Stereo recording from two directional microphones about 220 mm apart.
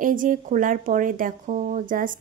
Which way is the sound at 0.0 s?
35° right (ahead or behind).